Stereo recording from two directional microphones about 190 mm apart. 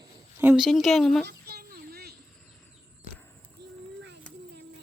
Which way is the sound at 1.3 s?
55° right (ahead or behind).